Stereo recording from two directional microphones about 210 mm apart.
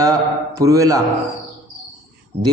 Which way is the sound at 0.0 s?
15° right (ahead or behind).